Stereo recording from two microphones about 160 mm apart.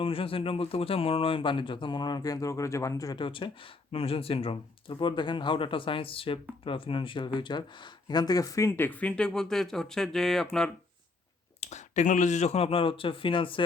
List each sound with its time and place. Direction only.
0.0 s speech: 35° left (ahead or behind); by 10.4 s 5° left (ahead or behind)
11.6 s speech: 45° left (ahead or behind)